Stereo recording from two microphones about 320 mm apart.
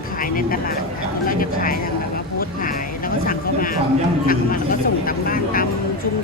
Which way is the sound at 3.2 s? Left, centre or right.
Left.